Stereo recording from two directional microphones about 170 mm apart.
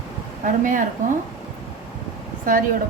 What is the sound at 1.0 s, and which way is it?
Speech, 45° right (ahead or behind).